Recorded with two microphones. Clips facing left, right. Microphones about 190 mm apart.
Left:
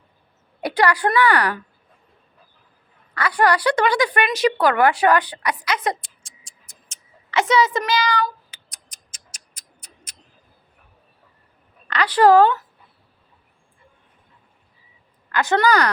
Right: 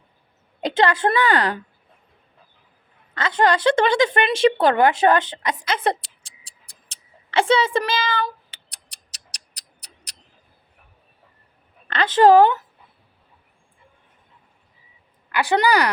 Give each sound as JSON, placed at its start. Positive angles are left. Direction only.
{"t": 0.6, "sound": "a woman's voice", "side_deg": -25}
{"t": 3.2, "sound": "a woman's voice", "side_deg": -25}
{"t": 6.4, "sound": "tick", "side_deg": -35}
{"t": 11.9, "sound": "a woman's voice", "side_deg": -25}
{"t": 15.3, "sound": "a woman's voice", "side_deg": -15}